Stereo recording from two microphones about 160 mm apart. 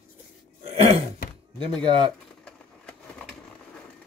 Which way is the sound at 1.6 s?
30° right (ahead or behind).